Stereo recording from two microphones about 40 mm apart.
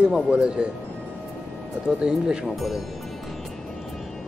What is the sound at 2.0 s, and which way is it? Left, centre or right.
Speech, centre.